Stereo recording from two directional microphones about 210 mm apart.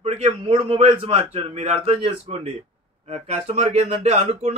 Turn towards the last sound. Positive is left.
turn(degrees=-30)  # may be behind; listen again after turning